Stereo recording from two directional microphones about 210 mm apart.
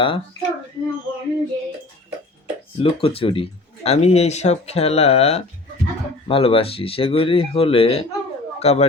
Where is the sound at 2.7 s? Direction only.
25° left (ahead or behind).